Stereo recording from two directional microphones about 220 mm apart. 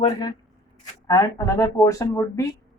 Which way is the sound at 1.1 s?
15° left (ahead or behind).